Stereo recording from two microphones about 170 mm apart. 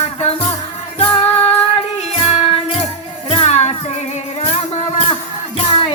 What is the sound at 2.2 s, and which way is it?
Music, 40° left (ahead or behind).